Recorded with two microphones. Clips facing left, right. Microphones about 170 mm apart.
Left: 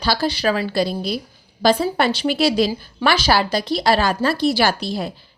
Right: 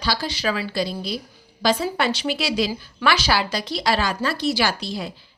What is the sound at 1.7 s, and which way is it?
Speech, 35° left (ahead or behind).